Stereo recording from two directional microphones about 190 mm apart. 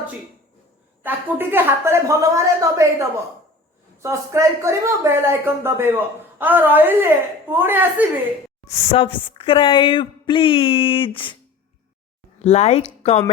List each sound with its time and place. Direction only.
1.0 s a woman's voice: 10° right (ahead or behind)
8.9 s speech: 30° left (ahead or behind)
12.4 s speech: 35° left (ahead or behind)